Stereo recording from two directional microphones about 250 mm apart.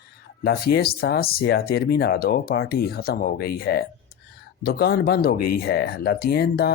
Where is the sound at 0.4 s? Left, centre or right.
Left.